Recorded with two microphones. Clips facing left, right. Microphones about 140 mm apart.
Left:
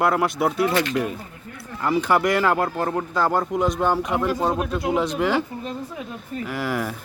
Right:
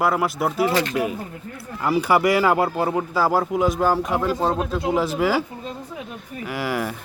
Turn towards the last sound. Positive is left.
turn(degrees=0)  # may be behind; listen again after turning